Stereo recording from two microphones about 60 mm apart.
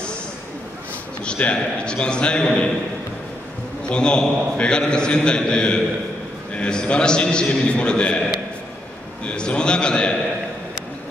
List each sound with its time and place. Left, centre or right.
1.2 s a man's voice: centre
3.8 s a man's voice: centre
9.2 s a man's voice: centre